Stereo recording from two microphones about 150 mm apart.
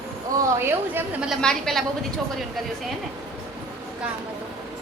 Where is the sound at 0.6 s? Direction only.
10° right (ahead or behind).